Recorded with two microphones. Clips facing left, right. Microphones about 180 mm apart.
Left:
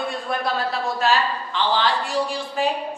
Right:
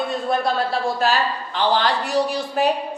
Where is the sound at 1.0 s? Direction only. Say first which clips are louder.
Even; 40° right (ahead or behind).